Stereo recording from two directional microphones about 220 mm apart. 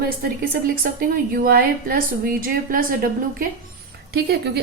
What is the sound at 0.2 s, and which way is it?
A woman's voice, 40° right (ahead or behind).